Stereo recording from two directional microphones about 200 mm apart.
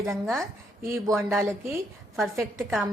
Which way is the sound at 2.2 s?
Centre (ahead or behind).